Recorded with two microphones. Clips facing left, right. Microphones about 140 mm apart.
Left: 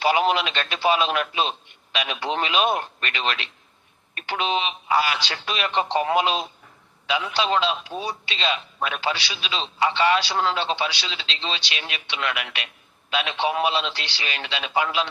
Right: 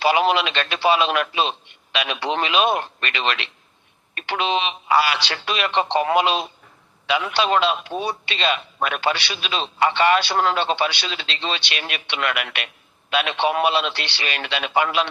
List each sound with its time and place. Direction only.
0.0 s a man's voice: 90° right; by 15.0 s 60° right (ahead or behind)